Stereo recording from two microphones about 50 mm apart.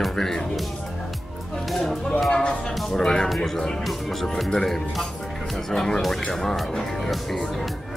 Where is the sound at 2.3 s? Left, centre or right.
Centre.